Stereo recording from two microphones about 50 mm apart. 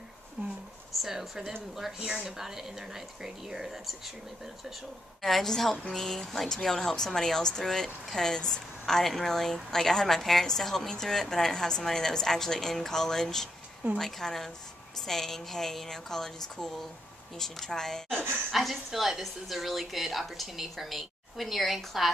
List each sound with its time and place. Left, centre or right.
0.4 s a sound: right
1.0 s speech: centre
5.2 s a woman's voice: centre
18.5 s a woman's voice: centre